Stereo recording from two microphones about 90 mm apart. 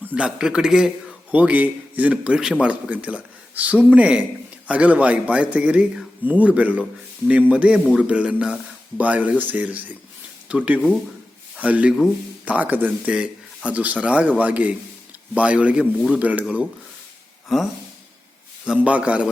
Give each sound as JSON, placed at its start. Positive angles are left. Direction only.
{"t": 0.1, "sound": "a man's voice", "side_deg": -10}
{"t": 1.3, "sound": "a man's voice", "side_deg": -15}
{"t": 11.6, "sound": "a man's voice", "side_deg": -15}
{"t": 17.5, "sound": "a sound", "side_deg": 0}
{"t": 18.6, "sound": "a man's voice", "side_deg": -10}